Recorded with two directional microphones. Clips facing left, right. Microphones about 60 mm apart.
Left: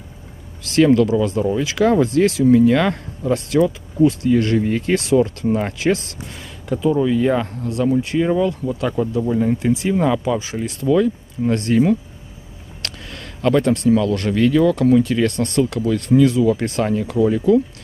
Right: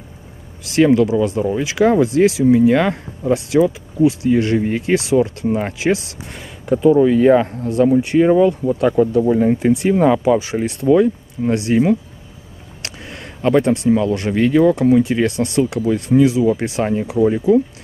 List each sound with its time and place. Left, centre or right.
0.7 s speech: centre
7.9 s speech: centre
8.2 s speech: right